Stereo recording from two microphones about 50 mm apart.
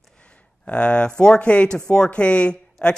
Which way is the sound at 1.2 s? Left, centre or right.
Centre.